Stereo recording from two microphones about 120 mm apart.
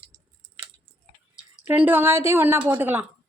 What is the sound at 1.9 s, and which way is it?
A woman's voice, 20° right (ahead or behind).